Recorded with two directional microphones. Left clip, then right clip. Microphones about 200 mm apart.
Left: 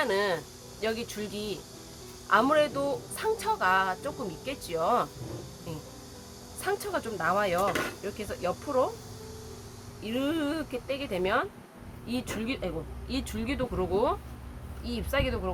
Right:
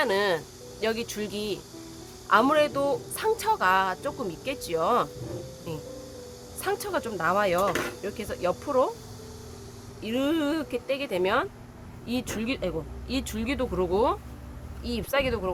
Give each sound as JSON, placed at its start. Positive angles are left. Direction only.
{"t": 0.0, "sound": "speech", "side_deg": -45}
{"t": 6.6, "sound": "speech", "side_deg": -45}
{"t": 10.0, "sound": "speech", "side_deg": -45}